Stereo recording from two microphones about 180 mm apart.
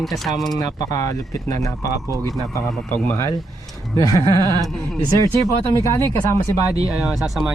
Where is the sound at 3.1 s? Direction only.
15° left (ahead or behind).